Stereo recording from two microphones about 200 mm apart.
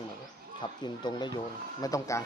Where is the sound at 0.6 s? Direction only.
20° left (ahead or behind).